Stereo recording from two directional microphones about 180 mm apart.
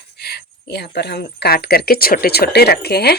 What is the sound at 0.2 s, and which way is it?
Speech, 65° left (ahead or behind).